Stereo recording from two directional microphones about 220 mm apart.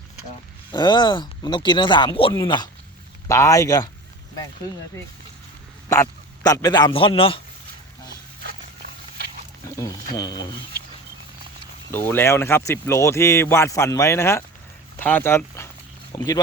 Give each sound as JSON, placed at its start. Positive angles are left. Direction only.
{"t": 0.7, "sound": "speech", "side_deg": 20}
{"t": 5.9, "sound": "speech", "side_deg": 15}
{"t": 8.1, "sound": "a sound", "side_deg": -45}
{"t": 9.6, "sound": "speech", "side_deg": 15}
{"t": 11.9, "sound": "speech", "side_deg": 10}